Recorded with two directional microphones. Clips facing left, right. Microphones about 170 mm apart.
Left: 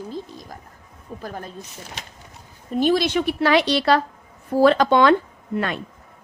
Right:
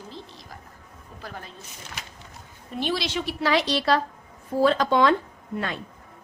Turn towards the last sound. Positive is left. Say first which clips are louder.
# left 5 dB
turn(degrees=65)  # may be behind; listen again after turning